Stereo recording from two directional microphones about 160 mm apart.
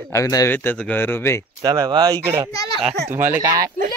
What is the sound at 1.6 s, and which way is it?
Speech, 25° right (ahead or behind).